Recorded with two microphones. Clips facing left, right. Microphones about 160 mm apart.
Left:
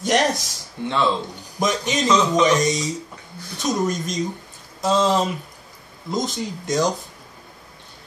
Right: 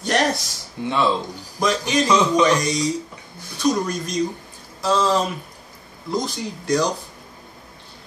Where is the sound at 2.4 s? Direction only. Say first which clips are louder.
Even; 20° left (ahead or behind).